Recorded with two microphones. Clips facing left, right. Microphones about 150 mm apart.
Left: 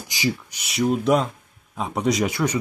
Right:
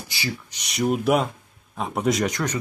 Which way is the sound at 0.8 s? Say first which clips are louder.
Left 1 dB; 5° right (ahead or behind).